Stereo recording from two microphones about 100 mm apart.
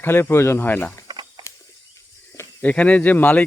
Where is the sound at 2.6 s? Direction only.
15° left (ahead or behind).